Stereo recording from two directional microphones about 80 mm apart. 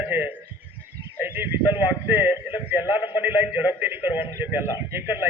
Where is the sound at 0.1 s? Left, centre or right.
Right.